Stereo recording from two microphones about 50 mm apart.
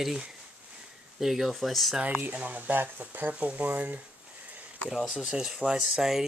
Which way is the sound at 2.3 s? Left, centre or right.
Right.